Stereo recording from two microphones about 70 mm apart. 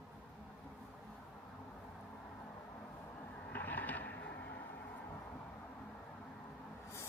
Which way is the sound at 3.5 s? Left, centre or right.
Left.